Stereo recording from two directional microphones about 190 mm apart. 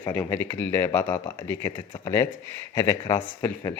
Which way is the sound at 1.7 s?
25° left (ahead or behind).